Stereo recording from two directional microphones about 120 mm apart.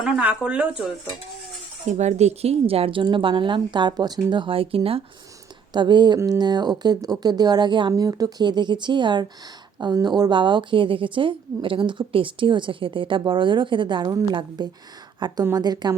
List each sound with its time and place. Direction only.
0.0 s speech: 10° right (ahead or behind)
1.9 s a woman's voice: 75° right (ahead or behind); by 5.0 s 50° right (ahead or behind)
5.7 s a woman's voice: 40° right (ahead or behind)